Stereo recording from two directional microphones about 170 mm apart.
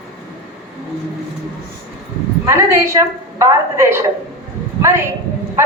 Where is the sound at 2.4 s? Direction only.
15° right (ahead or behind).